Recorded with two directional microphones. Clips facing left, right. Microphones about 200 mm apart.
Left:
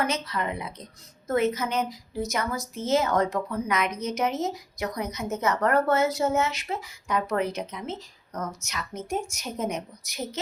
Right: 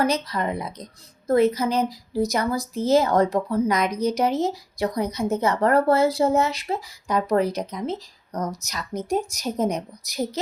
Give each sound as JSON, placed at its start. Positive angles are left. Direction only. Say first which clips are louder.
{"t": 0.0, "sound": "a woman's voice", "louder": "right 5 dB", "side_deg": -35}